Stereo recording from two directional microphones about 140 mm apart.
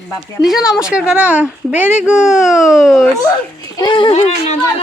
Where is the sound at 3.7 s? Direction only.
30° left (ahead or behind).